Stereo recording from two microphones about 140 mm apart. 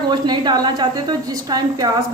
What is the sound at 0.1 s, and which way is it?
A woman's voice, 30° right (ahead or behind).